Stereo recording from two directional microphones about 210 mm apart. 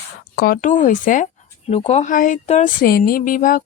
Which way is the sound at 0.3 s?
45° left (ahead or behind).